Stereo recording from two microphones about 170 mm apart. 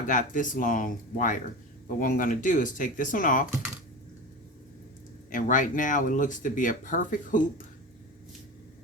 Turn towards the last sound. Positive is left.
turn(degrees=50)  # may be behind; listen again after turning